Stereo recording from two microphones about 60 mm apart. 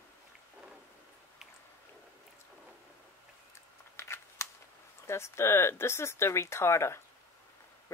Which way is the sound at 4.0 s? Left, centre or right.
Left.